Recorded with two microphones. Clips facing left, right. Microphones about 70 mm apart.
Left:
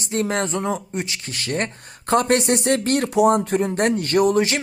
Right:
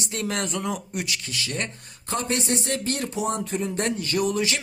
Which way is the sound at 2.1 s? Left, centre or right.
Left.